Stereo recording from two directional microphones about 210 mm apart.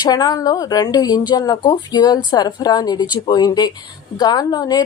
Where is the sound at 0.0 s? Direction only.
20° left (ahead or behind).